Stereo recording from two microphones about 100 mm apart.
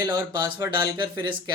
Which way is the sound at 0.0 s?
40° right (ahead or behind).